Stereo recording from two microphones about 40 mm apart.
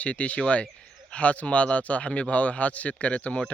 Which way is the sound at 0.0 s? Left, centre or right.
Left.